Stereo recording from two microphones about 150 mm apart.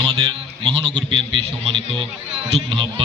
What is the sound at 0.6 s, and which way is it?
A man's voice, 35° right (ahead or behind).